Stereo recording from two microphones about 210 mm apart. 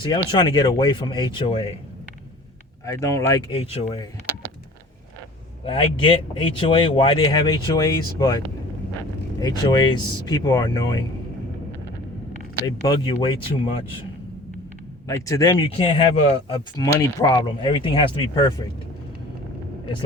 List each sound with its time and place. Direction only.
0.0 s speech: 20° left (ahead or behind)
2.8 s speech: 15° left (ahead or behind)
3.5 s speech: 30° left (ahead or behind)
5.6 s speech: 25° left (ahead or behind)
9.4 s speech: 20° left (ahead or behind)
12.6 s speech: 20° left (ahead or behind)
15.0 s speech: 15° left (ahead or behind)
16.8 s speech: 15° left (ahead or behind)